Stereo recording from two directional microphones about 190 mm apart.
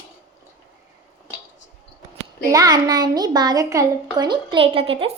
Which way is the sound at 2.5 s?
20° right (ahead or behind).